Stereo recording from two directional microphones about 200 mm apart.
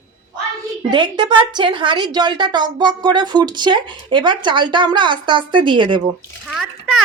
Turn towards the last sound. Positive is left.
turn(degrees=0)  # may be behind; listen again after turning